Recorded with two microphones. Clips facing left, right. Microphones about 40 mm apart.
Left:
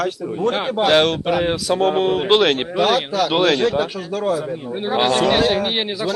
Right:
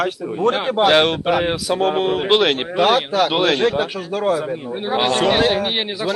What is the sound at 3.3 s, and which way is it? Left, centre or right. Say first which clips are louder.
Speech: left 4 dB; centre.